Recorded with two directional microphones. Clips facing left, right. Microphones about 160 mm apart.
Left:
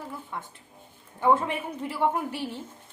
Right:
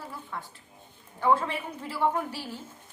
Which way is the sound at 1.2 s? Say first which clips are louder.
Left 2 dB; 20° left (ahead or behind).